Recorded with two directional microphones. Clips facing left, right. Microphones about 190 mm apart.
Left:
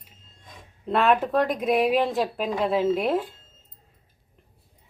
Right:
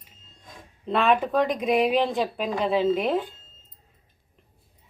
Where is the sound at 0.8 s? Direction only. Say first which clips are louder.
Left 1 dB; 5° left (ahead or behind).